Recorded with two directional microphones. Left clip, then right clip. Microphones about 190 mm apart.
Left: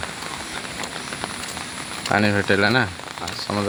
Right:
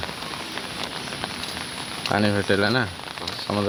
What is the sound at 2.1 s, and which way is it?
Speech, 5° left (ahead or behind).